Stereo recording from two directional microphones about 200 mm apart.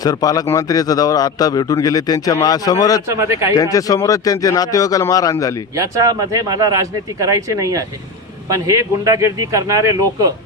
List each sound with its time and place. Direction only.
0.0 s a man's voice: 20° left (ahead or behind)
3.1 s speech: 15° right (ahead or behind)
3.5 s a man's voice: 15° left (ahead or behind)
5.7 s speech: 15° right (ahead or behind)